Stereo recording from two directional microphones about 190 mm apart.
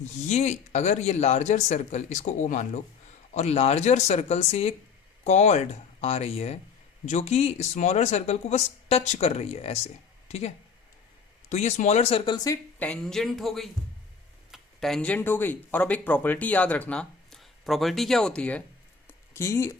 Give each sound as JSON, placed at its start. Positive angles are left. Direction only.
{"t": 0.0, "sound": "speech", "side_deg": 35}
{"t": 12.8, "sound": "speech", "side_deg": 5}
{"t": 19.0, "sound": "a sound", "side_deg": 15}